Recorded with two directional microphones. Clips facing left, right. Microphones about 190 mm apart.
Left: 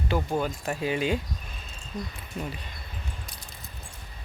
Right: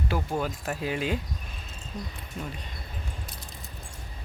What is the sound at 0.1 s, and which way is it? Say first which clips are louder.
Speech: left 4 dB; 5° right (ahead or behind).